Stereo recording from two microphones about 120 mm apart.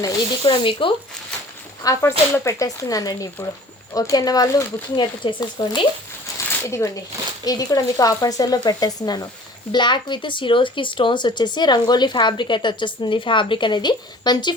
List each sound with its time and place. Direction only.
0.0 s speech: 40° left (ahead or behind)
1.8 s speech: 25° left (ahead or behind); by 5.8 s 40° left (ahead or behind)
6.7 s speech: 25° left (ahead or behind)